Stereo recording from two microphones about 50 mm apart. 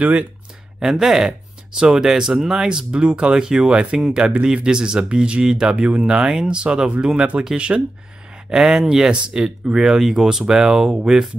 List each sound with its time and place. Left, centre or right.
0.0 s speech: right
0.7 s speech: centre